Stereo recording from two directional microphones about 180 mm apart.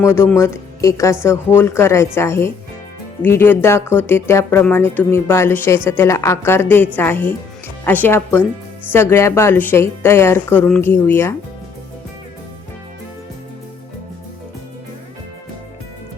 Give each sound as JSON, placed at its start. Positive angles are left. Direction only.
{"t": 0.0, "sound": "speech", "side_deg": 15}